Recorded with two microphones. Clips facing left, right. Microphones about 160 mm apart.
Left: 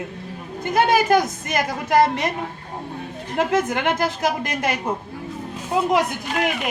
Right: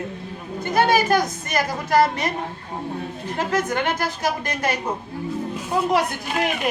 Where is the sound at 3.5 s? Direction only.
20° left (ahead or behind).